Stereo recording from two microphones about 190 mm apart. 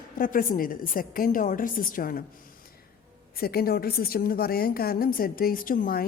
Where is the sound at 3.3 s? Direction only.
55° left (ahead or behind).